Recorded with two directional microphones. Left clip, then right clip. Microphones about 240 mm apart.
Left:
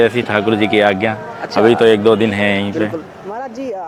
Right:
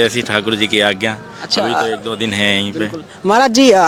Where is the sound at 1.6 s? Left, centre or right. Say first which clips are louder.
Left 8 dB; left.